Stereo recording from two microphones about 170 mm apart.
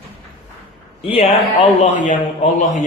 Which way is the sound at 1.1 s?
35° left (ahead or behind).